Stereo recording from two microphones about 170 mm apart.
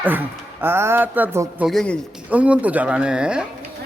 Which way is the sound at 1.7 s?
5° left (ahead or behind).